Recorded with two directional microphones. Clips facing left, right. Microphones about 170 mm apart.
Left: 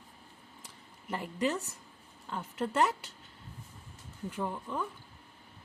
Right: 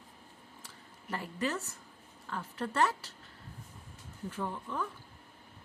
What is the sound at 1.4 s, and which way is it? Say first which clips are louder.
A woman's voice: left 4 dB; 20° left (ahead or behind).